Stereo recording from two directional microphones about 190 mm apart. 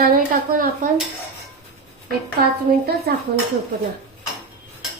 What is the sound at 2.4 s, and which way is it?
Speech, 55° right (ahead or behind).